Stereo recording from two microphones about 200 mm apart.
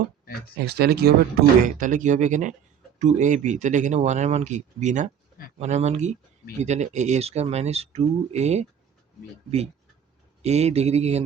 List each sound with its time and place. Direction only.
0.6 s speech: 55° right (ahead or behind)
1.6 s speech: 40° right (ahead or behind)
10.4 s speech: 35° right (ahead or behind)